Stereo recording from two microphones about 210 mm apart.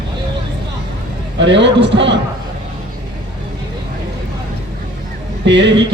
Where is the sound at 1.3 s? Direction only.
55° right (ahead or behind).